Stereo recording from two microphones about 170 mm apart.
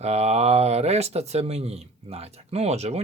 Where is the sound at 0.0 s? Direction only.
40° right (ahead or behind).